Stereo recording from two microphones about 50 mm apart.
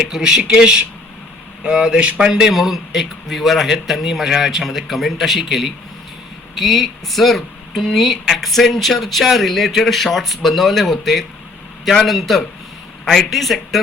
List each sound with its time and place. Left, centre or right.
0.1 s speech: centre
2.1 s speech: centre